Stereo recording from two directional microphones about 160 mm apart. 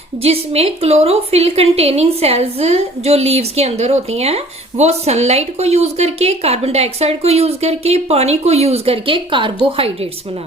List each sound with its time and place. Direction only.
0.2 s a woman's voice: 40° right (ahead or behind)